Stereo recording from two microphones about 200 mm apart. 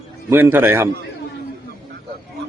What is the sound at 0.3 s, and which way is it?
Speech, 10° right (ahead or behind).